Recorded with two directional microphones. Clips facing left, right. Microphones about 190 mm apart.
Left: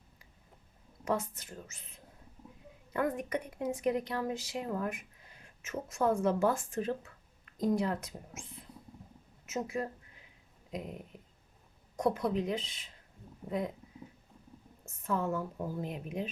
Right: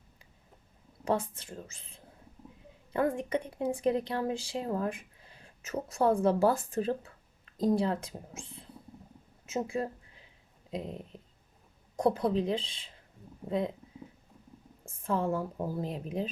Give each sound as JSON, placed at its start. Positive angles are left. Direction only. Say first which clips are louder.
{"t": 1.0, "sound": "speech", "louder": "right 3 dB", "side_deg": -30}
{"t": 14.8, "sound": "speech", "louder": "right 3 dB", "side_deg": -30}